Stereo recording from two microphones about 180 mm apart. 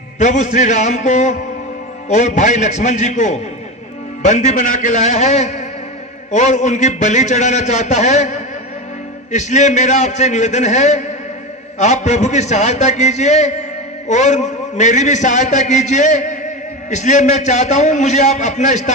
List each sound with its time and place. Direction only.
0.2 s a man's voice: 40° left (ahead or behind)